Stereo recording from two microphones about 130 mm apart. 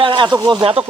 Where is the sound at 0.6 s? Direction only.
45° right (ahead or behind).